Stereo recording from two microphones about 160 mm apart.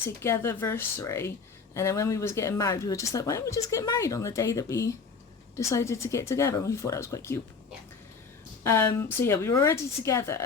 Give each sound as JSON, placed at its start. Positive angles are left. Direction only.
{"t": 0.0, "sound": "speech", "side_deg": 15}
{"t": 8.6, "sound": "speech", "side_deg": 15}